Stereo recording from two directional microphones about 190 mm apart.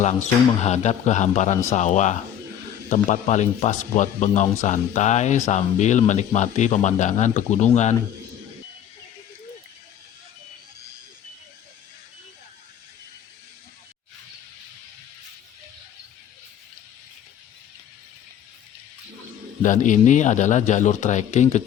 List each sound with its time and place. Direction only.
0.0 s speech: 35° left (ahead or behind)
19.6 s speech: 40° left (ahead or behind)